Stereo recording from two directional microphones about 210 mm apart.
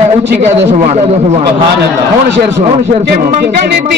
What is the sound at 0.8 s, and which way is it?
Speech, 30° right (ahead or behind).